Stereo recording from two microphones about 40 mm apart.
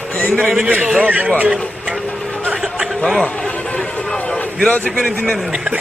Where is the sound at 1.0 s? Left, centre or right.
Right.